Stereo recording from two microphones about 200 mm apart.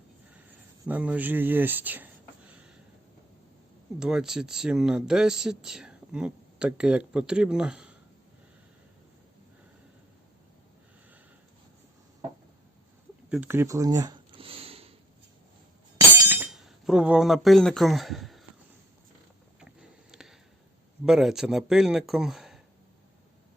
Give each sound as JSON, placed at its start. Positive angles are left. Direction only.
{"t": 0.9, "sound": "speech", "side_deg": -5}
{"t": 4.0, "sound": "speech", "side_deg": -5}
{"t": 13.3, "sound": "a sound", "side_deg": -10}
{"t": 16.3, "sound": "speech", "side_deg": -5}
{"t": 19.5, "sound": "a sound", "side_deg": -5}
{"t": 21.0, "sound": "speech", "side_deg": 0}